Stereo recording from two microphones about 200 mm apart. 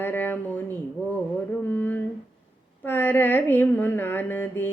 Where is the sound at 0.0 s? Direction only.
10° left (ahead or behind).